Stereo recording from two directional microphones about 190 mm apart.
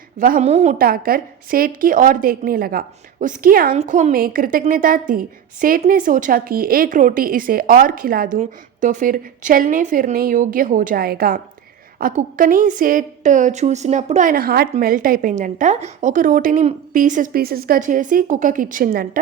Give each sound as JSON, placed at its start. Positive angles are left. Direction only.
{"t": 0.2, "sound": "a woman's voice", "side_deg": -45}
{"t": 3.8, "sound": "a woman's voice", "side_deg": -40}